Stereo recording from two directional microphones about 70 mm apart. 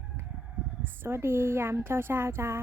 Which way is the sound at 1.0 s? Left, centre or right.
Right.